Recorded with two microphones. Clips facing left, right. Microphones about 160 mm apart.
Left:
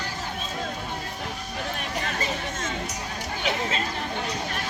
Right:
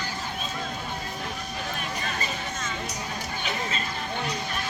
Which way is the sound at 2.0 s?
85° left.